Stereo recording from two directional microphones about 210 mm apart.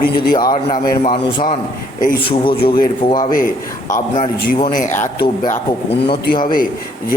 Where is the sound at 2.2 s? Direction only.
25° left (ahead or behind).